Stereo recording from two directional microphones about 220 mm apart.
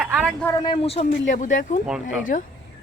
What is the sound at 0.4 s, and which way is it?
Speech, 15° left (ahead or behind).